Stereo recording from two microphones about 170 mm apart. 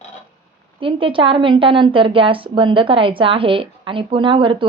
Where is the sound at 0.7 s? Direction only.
30° right (ahead or behind).